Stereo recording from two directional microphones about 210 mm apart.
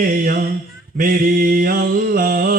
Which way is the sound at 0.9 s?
45° right (ahead or behind).